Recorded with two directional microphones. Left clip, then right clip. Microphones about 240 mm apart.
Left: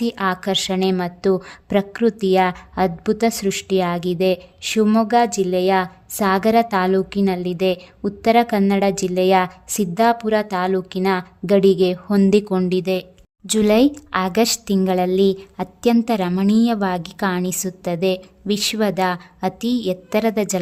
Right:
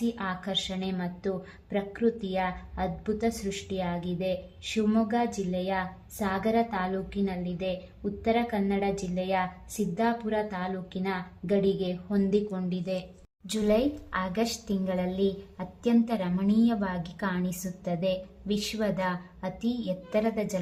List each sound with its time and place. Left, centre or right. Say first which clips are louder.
0.0 s a woman's voice: left 11 dB; left